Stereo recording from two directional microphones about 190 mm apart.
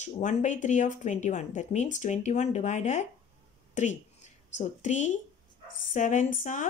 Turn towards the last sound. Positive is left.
turn(degrees=40)  # may be behind; listen again after turning